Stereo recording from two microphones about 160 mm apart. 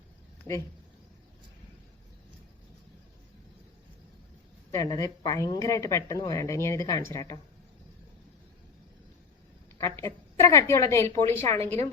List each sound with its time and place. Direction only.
4.7 s speech: 20° left (ahead or behind)
10.0 s a woman's voice: 20° left (ahead or behind)